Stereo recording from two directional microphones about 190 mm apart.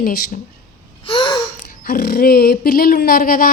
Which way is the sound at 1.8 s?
55° left (ahead or behind).